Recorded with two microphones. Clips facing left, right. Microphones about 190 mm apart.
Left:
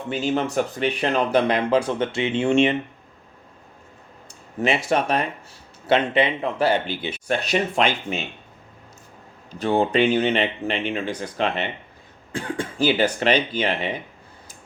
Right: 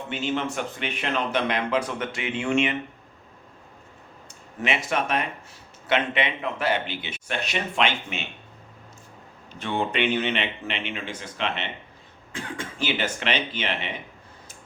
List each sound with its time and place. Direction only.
0.1 s speech: 40° left (ahead or behind)
4.6 s speech: 35° left (ahead or behind)
9.5 s speech: 40° left (ahead or behind)